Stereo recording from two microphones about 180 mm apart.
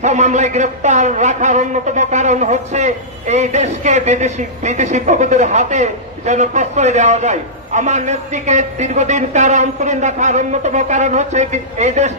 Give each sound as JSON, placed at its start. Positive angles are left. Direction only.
{"t": 0.0, "sound": "speech", "side_deg": -40}